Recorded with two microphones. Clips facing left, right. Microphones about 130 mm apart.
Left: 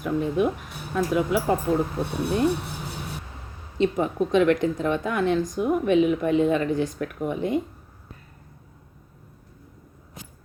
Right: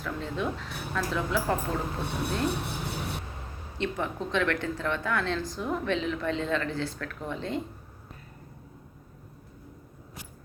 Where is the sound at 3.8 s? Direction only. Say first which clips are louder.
Left 9 dB; 20° left (ahead or behind).